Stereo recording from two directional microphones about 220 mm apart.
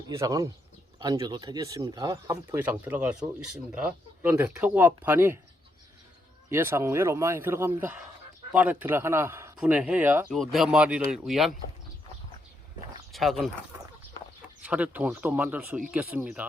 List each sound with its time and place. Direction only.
0.1 s speech: 15° right (ahead or behind)
6.5 s speech: 10° right (ahead or behind)
13.1 s speech: centre (ahead or behind)
14.6 s speech: 5° right (ahead or behind)